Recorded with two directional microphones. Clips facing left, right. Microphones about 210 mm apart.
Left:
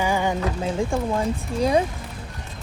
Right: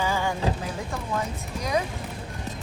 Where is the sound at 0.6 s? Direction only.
30° left (ahead or behind).